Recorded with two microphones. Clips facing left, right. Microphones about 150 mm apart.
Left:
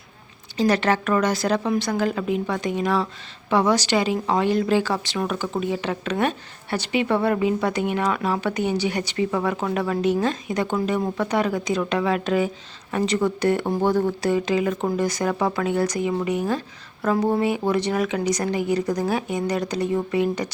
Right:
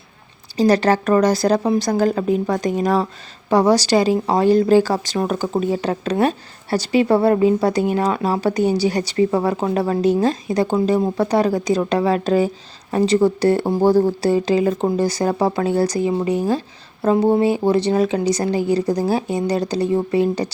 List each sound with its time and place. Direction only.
0.5 s speech: 35° right (ahead or behind)